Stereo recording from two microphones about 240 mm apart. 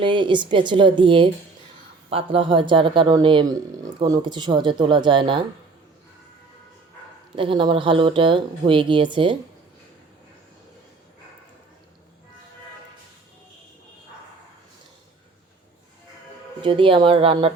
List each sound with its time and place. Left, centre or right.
0.0 s speech: centre
7.3 s speech: right
16.6 s speech: right